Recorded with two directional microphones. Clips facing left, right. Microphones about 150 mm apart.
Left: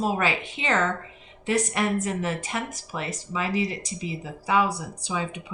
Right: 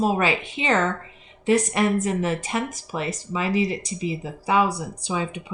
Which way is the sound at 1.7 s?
20° right (ahead or behind).